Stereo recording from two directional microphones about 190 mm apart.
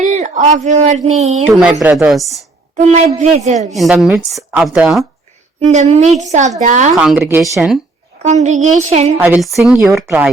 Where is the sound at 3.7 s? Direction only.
Centre (ahead or behind).